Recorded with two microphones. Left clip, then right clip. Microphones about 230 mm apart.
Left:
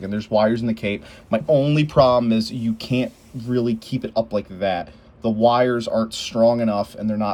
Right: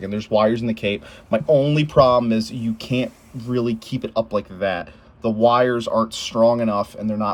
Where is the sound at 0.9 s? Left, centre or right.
Right.